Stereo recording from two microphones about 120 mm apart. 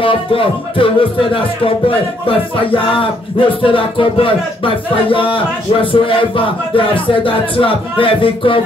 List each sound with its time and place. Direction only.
0.0 s music: 50° left (ahead or behind)